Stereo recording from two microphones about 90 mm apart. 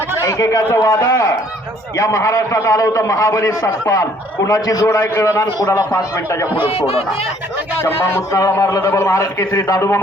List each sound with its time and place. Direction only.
0.2 s a man's voice: 35° left (ahead or behind)
6.7 s speech: 90° left
7.8 s a man's voice: 25° left (ahead or behind)